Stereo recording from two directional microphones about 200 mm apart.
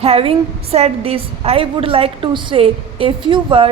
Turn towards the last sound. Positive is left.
turn(degrees=-25)  # may be behind; listen again after turning